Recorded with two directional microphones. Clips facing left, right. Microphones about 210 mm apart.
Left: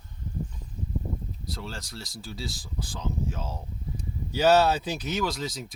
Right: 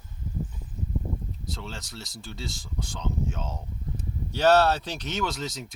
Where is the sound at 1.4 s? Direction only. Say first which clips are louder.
Left 2 dB; centre (ahead or behind).